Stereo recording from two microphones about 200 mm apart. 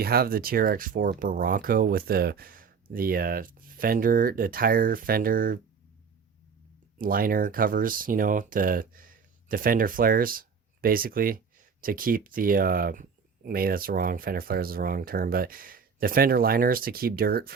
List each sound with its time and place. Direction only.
0.0 s speech: 50° right (ahead or behind)
7.0 s speech: 45° right (ahead or behind)